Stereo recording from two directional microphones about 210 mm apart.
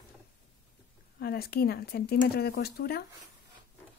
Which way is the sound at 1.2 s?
45° left (ahead or behind).